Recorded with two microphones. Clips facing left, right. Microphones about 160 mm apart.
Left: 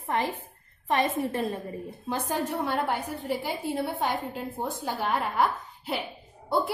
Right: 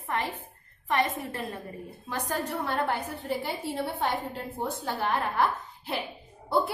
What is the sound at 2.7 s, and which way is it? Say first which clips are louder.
A woman's voice: left 1 dB; centre (ahead or behind).